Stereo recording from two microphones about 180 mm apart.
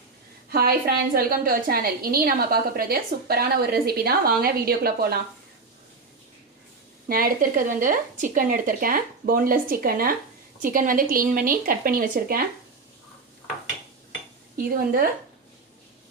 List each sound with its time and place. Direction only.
0.5 s a woman's voice: 55° right (ahead or behind)
7.1 s speech: 55° right (ahead or behind)
14.5 s speech: 55° right (ahead or behind)